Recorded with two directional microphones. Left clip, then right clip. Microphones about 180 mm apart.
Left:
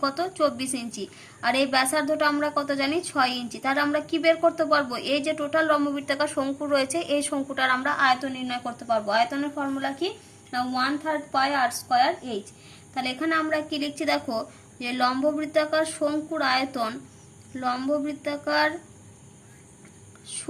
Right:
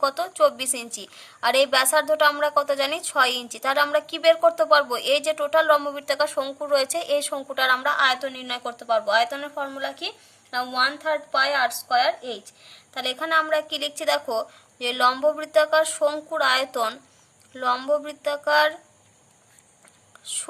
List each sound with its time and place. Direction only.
0.0 s a woman's voice: 45° right (ahead or behind)
20.2 s speech: 50° right (ahead or behind)